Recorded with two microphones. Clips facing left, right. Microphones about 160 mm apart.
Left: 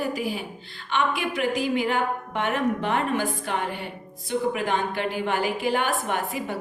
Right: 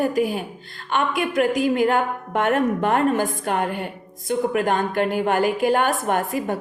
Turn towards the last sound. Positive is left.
turn(degrees=-45)  # may be behind; listen again after turning